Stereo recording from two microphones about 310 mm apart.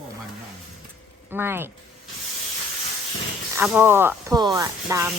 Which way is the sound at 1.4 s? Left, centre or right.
Centre.